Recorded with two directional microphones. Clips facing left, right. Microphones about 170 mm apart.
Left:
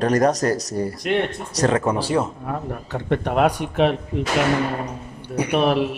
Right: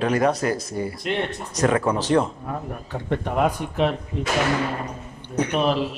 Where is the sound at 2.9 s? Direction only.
75° left (ahead or behind).